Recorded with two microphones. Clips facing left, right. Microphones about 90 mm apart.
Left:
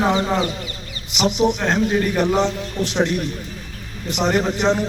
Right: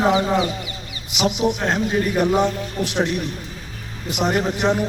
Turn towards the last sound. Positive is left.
turn(degrees=-5)  # may be behind; listen again after turning